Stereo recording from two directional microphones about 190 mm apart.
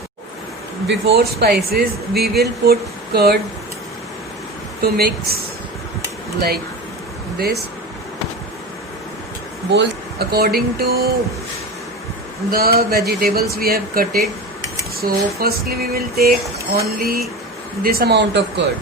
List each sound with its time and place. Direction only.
0.9 s speech: 60° right (ahead or behind)
4.8 s speech: 55° right (ahead or behind)
7.3 s a sound: 55° right (ahead or behind)
9.7 s speech: 55° right (ahead or behind)
12.5 s a sound: 55° right (ahead or behind)
17.8 s speech: 55° right (ahead or behind)